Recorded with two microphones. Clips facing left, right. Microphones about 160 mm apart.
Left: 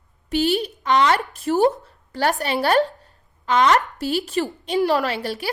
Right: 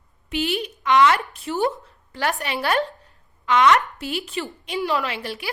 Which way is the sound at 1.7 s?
35° left (ahead or behind).